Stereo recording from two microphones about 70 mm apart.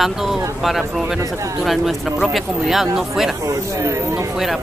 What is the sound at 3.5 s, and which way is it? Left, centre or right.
Speech, right.